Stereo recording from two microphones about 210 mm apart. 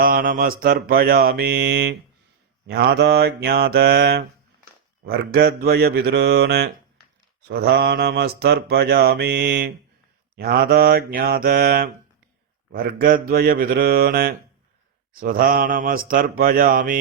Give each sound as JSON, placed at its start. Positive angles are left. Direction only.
{"t": 0.0, "sound": "mantra", "side_deg": -45}